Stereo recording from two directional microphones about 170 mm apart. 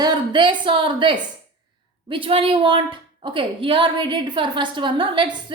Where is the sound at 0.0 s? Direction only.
25° right (ahead or behind).